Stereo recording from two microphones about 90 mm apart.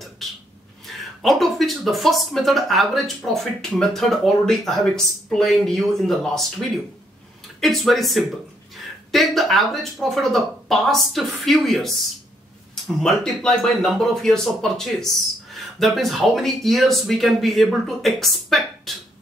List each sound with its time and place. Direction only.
0.2 s a sound: centre (ahead or behind)
0.8 s speech: centre (ahead or behind)
7.6 s speech: centre (ahead or behind)